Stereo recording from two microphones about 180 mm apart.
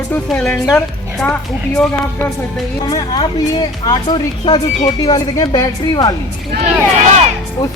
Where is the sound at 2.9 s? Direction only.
20° left (ahead or behind).